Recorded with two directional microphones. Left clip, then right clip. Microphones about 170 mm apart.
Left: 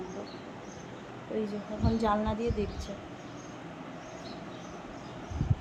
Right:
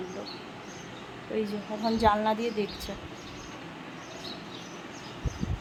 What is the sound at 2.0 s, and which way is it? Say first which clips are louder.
Speech: right 6 dB; 35° right (ahead or behind).